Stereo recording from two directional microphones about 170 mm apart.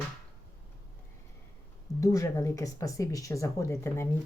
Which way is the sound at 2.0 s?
20° left (ahead or behind).